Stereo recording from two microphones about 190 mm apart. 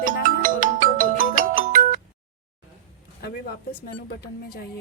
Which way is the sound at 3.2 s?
50° left (ahead or behind).